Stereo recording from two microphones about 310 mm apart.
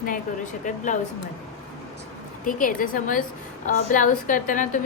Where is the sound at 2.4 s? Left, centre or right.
Left.